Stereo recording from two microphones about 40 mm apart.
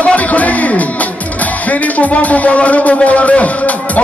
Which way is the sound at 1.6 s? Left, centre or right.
Left.